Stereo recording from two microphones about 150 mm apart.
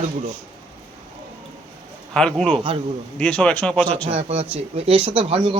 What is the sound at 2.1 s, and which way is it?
A man's voice, 5° left (ahead or behind).